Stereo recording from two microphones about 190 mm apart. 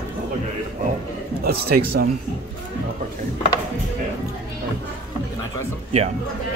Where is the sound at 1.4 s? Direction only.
55° right (ahead or behind).